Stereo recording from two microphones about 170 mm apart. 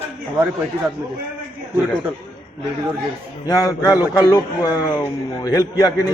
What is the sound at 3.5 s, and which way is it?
A man's voice, 20° left (ahead or behind).